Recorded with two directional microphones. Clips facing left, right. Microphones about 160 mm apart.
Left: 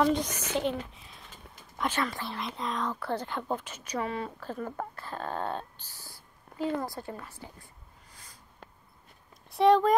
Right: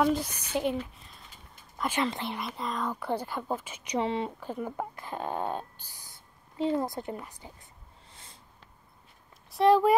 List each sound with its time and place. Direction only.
0.0 s speech: 5° right (ahead or behind)
1.9 s speech: 20° right (ahead or behind)
2.4 s speech: centre (ahead or behind)
2.9 s speech: 15° right (ahead or behind)
8.1 s a sound: 25° right (ahead or behind)
9.5 s speech: centre (ahead or behind)